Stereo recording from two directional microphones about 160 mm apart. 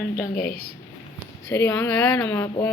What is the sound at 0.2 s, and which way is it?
Speech, 65° left (ahead or behind).